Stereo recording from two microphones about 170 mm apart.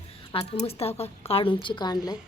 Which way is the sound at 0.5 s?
35° left (ahead or behind).